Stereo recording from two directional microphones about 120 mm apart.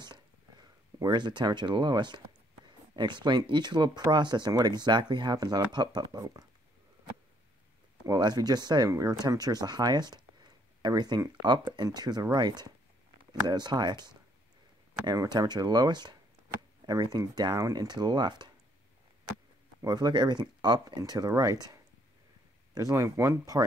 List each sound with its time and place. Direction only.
0.0 s a sound: 35° right (ahead or behind)
3.0 s speech: 40° right (ahead or behind)
8.1 s speech: 35° right (ahead or behind)
19.8 s speech: 35° right (ahead or behind)
22.8 s speech: 30° right (ahead or behind)